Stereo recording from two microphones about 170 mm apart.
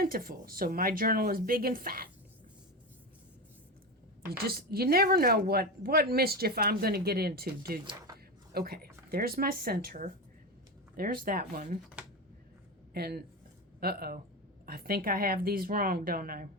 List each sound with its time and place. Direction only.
0.0 s a woman's voice: 60° right (ahead or behind)
4.3 s a woman's voice: 65° right (ahead or behind)
12.9 s a woman's voice: 65° right (ahead or behind)